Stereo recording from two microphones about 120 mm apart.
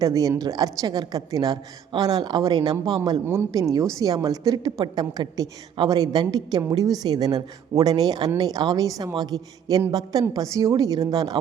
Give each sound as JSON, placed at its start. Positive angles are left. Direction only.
{"t": 0.0, "sound": "a woman's voice", "side_deg": -30}